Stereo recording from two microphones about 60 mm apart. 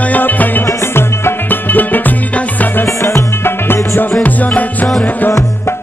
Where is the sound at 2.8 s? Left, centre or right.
Left.